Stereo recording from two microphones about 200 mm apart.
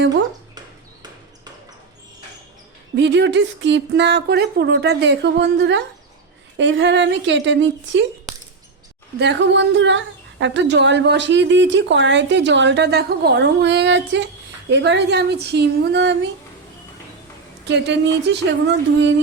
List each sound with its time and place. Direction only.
2.9 s a woman's voice: 60° right (ahead or behind)
9.1 s a woman's voice: 60° right (ahead or behind)
17.7 s a woman's voice: 60° right (ahead or behind)